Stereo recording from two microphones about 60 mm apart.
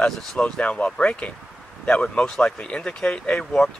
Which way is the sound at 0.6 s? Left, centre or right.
Left.